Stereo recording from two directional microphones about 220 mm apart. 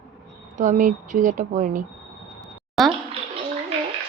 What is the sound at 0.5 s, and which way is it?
Speech, 35° right (ahead or behind).